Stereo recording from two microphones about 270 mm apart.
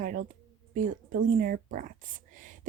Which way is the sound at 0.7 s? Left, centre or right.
Right.